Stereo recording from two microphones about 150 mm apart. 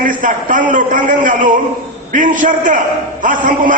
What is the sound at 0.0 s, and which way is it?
A man's voice, 60° right (ahead or behind).